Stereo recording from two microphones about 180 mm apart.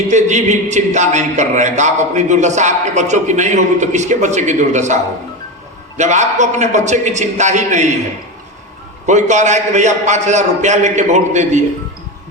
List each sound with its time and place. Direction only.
0.1 s speech: 40° right (ahead or behind)
6.0 s speech: 40° right (ahead or behind)
9.0 s speech: 40° right (ahead or behind)